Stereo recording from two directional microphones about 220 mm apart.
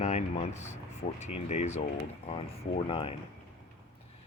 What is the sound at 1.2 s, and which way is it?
Speech, 30° left (ahead or behind).